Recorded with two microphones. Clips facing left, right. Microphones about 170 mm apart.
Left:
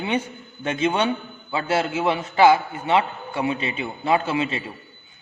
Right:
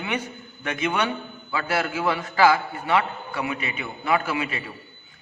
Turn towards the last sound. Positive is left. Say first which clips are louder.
# left 3 dB
turn(degrees=25)  # may be behind; listen again after turning